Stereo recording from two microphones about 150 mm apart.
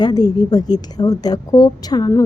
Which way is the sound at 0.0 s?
25° left (ahead or behind).